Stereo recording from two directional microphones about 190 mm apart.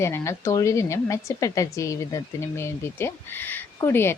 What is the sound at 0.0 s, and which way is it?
A woman's voice, 15° left (ahead or behind).